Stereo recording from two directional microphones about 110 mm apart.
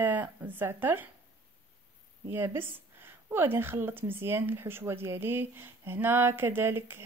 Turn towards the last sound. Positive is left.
turn(degrees=-20)  # may be behind; listen again after turning